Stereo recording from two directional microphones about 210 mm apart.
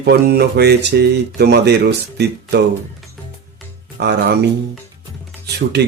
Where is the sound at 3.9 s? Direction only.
50° right (ahead or behind).